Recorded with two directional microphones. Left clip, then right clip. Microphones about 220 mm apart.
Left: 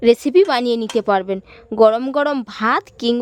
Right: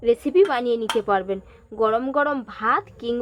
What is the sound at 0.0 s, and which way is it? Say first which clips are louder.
A woman's voice: left 5 dB; 55° left (ahead or behind).